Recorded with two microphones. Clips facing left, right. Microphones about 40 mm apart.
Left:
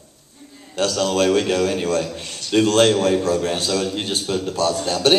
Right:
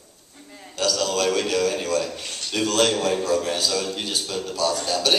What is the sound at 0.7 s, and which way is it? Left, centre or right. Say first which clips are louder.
A man's voice: left 4 dB; left.